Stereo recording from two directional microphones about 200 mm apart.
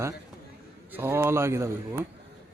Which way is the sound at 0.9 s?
10° right (ahead or behind).